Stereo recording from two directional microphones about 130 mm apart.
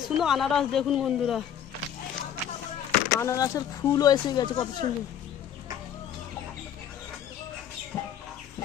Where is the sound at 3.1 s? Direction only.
20° left (ahead or behind).